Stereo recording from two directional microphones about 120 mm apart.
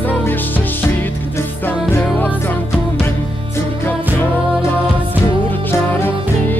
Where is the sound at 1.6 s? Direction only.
15° left (ahead or behind).